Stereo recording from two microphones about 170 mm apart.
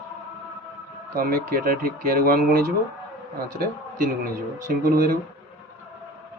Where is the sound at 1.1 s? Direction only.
60° right (ahead or behind).